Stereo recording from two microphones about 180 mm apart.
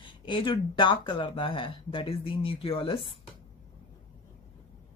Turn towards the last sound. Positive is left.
turn(degrees=30)  # may be behind; listen again after turning